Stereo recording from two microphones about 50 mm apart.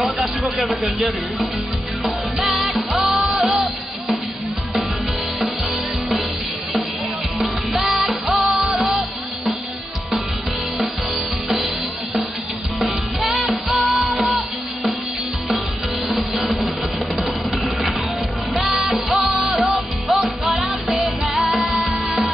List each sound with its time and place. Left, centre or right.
0.0 s speech: centre
2.0 s music: centre
3.3 s music: centre
7.3 s music: centre
11.4 s music: centre
16.1 s music: centre
18.6 s music: centre